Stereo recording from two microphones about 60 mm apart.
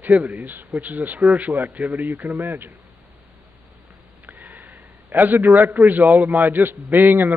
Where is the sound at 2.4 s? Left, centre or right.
Right.